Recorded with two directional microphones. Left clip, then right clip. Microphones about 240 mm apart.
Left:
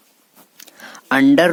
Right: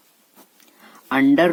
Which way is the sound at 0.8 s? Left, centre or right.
Left.